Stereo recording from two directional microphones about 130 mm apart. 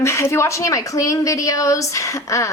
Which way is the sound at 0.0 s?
20° left (ahead or behind).